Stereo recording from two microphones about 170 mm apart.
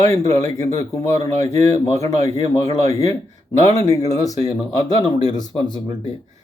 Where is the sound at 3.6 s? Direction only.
20° left (ahead or behind).